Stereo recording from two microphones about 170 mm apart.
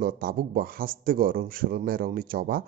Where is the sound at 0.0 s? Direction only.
60° right (ahead or behind).